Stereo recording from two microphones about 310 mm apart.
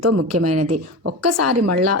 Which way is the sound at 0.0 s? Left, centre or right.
Right.